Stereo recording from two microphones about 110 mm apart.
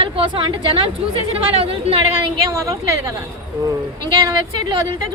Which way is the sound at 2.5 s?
30° right (ahead or behind).